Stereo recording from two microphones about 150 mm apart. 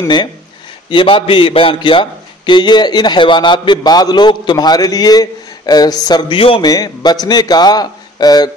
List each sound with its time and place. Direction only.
0.8 s a man's voice: 35° left (ahead or behind)
6.7 s a man's voice: 25° left (ahead or behind)